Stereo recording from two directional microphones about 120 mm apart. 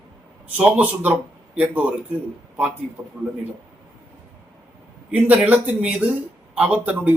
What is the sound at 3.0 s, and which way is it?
Speech, 35° right (ahead or behind).